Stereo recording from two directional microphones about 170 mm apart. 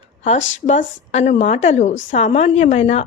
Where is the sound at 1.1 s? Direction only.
40° left (ahead or behind).